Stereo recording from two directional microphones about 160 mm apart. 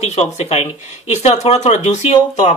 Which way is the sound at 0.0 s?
45° left (ahead or behind).